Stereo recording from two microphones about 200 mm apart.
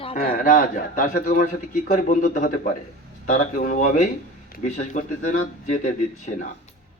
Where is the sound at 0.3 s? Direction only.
45° left (ahead or behind).